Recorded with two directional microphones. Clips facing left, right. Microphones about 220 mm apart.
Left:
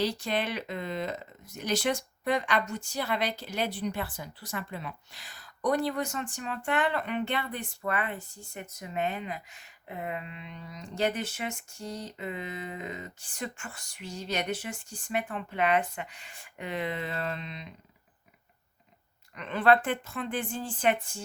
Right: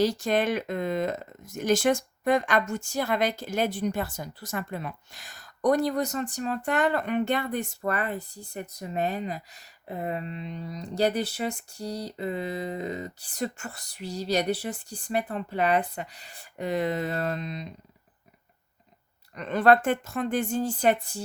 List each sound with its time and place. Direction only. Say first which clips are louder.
0.0 s speech: right 6 dB; 45° right (ahead or behind)
19.4 s a woman's voice: right 3 dB; 40° right (ahead or behind)